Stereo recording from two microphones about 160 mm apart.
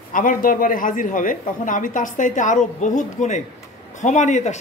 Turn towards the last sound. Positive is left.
turn(degrees=50)  # may be behind; listen again after turning